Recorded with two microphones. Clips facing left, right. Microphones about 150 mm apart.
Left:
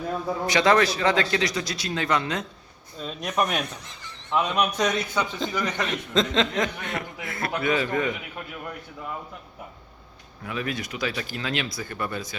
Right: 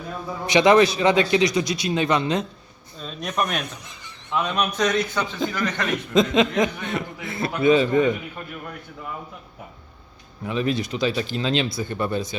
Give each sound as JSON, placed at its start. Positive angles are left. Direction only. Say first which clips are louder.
{"t": 0.4, "sound": "a man's voice", "louder": "right 5 dB", "side_deg": -20}
{"t": 3.0, "sound": "speech", "louder": "even", "side_deg": 5}
{"t": 3.8, "sound": "a sound", "louder": "even", "side_deg": -15}
{"t": 4.4, "sound": "a man's voice", "louder": "even", "side_deg": 15}
{"t": 5.9, "sound": "a man's voice", "louder": "right 7 dB", "side_deg": -10}
{"t": 10.4, "sound": "a man's voice", "louder": "right 6 dB", "side_deg": -25}